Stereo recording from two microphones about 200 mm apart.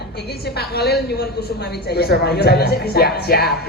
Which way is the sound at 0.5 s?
50° left (ahead or behind).